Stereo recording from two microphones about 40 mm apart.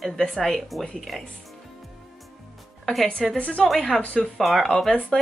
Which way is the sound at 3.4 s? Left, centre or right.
Left.